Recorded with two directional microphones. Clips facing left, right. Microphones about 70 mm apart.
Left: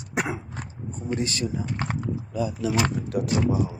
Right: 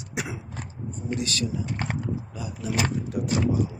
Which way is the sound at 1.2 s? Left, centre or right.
Left.